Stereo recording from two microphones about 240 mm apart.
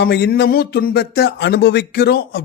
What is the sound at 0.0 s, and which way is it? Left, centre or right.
A man's voice, left.